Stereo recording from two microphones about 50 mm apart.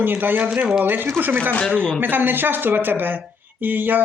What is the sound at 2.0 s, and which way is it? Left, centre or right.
Speech, right.